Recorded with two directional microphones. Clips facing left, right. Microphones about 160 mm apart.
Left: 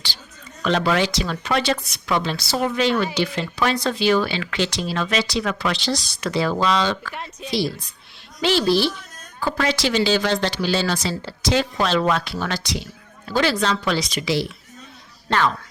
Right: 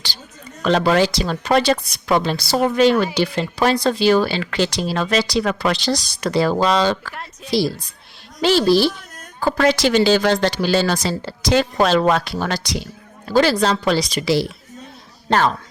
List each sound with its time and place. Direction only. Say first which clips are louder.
0.6 s speech: right 4 dB; 40° right (ahead or behind)
8.4 s speech: right 4 dB; 40° right (ahead or behind)